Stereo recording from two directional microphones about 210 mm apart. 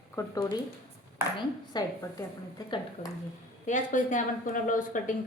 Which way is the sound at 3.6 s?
35° left (ahead or behind).